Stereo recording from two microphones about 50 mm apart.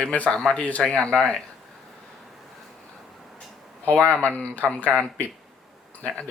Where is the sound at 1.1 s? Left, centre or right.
Centre.